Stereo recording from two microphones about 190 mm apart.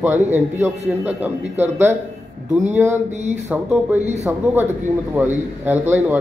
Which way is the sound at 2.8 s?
40° right (ahead or behind).